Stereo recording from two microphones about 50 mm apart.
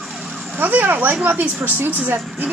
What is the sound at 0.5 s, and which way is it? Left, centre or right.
Speech, right.